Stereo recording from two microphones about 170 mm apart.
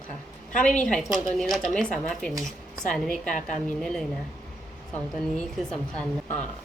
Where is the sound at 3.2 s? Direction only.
50° left (ahead or behind).